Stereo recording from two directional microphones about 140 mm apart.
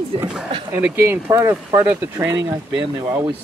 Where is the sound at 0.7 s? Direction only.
15° right (ahead or behind).